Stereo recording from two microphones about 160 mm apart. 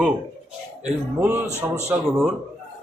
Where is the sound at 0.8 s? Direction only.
10° right (ahead or behind).